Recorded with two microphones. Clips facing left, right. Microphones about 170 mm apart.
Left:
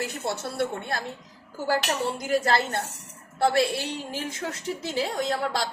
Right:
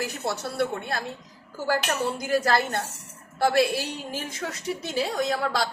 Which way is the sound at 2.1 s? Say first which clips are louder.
Even; 25° left (ahead or behind).